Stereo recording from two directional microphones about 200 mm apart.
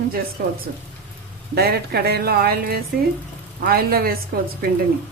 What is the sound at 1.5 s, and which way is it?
Speech, 55° right (ahead or behind).